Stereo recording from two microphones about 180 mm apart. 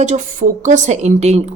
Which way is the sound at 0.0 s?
45° right (ahead or behind).